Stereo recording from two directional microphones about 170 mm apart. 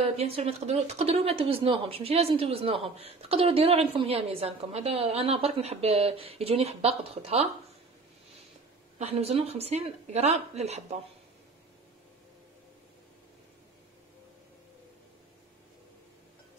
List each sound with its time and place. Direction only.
0.0 s a woman's voice: 35° right (ahead or behind)
8.9 s a woman's voice: 40° right (ahead or behind)